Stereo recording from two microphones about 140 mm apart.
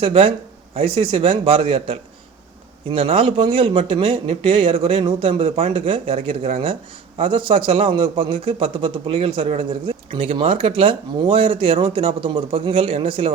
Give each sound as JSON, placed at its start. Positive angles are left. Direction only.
{"t": 0.0, "sound": "a man's voice", "side_deg": -40}